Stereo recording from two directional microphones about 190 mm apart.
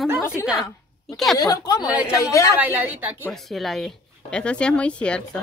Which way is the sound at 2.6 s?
10° right (ahead or behind).